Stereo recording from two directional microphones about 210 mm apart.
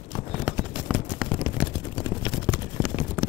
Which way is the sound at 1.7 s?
20° left (ahead or behind).